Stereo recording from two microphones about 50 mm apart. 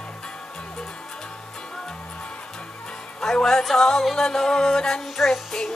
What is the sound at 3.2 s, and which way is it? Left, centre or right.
Music, centre.